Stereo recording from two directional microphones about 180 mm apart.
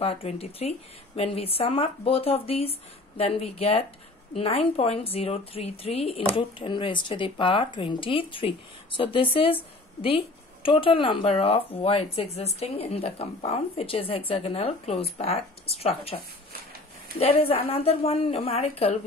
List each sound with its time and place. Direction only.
0.0 s speech: 35° left (ahead or behind)
17.2 s speech: 35° left (ahead or behind)